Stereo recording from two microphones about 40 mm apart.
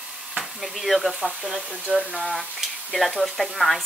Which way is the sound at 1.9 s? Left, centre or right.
Centre.